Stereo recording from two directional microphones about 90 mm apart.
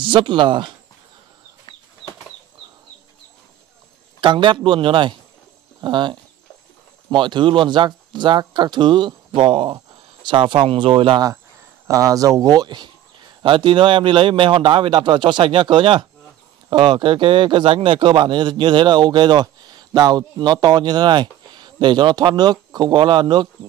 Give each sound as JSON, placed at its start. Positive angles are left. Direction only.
{"t": 0.0, "sound": "speech", "side_deg": -65}
{"t": 4.2, "sound": "speech", "side_deg": -65}
{"t": 10.2, "sound": "speech", "side_deg": -60}
{"t": 11.9, "sound": "speech", "side_deg": -40}
{"t": 13.4, "sound": "speech", "side_deg": -65}